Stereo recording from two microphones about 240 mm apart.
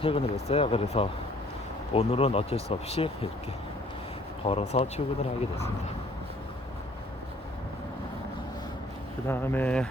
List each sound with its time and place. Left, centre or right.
0.0 s speech: left
4.4 s speech: left
9.2 s speech: centre